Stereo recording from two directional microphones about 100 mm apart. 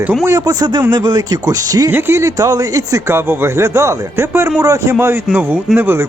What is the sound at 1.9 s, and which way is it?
Speech, 25° right (ahead or behind).